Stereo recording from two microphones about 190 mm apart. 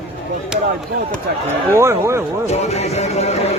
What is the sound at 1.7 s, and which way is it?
Speech, 15° right (ahead or behind).